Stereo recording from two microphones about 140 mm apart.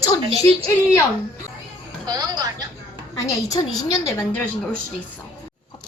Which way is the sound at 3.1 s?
25° left (ahead or behind).